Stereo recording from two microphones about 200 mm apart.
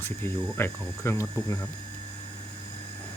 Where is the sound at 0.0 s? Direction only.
10° left (ahead or behind).